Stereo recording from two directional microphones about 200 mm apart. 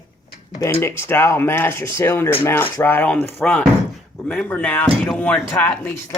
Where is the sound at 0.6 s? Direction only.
10° left (ahead or behind).